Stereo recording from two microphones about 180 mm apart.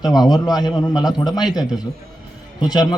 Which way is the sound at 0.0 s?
20° left (ahead or behind).